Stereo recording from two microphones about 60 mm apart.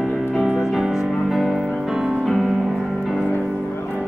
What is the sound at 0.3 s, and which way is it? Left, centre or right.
Music, centre.